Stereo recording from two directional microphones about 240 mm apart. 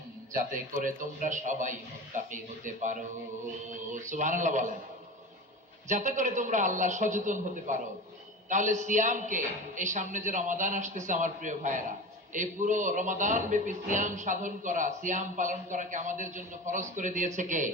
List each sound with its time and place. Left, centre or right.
0.3 s speech: right
5.9 s speech: right